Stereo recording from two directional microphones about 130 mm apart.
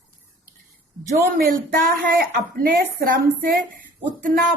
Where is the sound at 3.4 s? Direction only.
90° right.